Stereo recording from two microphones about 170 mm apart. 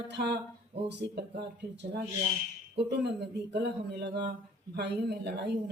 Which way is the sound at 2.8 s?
75° right (ahead or behind).